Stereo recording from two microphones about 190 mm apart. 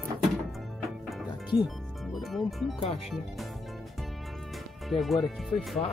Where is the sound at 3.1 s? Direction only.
Centre (ahead or behind).